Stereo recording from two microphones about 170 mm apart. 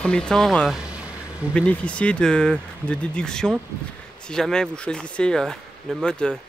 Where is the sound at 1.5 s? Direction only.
5° left (ahead or behind).